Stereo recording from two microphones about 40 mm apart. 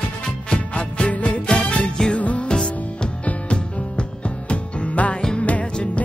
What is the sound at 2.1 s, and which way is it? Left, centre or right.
Music, left.